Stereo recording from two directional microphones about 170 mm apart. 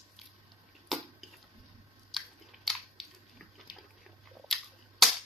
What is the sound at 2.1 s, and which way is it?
Chewing, centre (ahead or behind).